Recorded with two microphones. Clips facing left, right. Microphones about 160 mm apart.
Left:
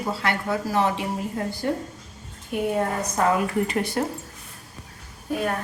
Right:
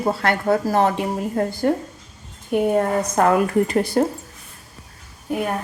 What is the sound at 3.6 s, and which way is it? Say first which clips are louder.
Speech: right 6 dB; 35° right (ahead or behind).